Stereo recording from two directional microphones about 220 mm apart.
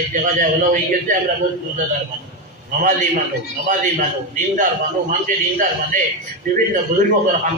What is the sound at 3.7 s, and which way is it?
A man's voice, 35° right (ahead or behind).